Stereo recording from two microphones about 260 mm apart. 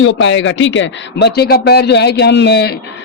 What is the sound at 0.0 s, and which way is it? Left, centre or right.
A man's voice, left.